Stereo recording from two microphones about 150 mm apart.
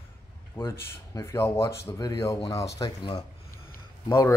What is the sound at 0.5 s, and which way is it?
Speech, 15° left (ahead or behind).